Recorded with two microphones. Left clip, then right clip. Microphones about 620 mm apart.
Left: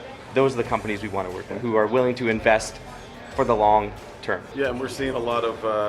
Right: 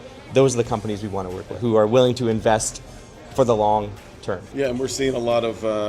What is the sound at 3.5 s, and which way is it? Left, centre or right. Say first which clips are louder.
Speech: left 1 dB; centre.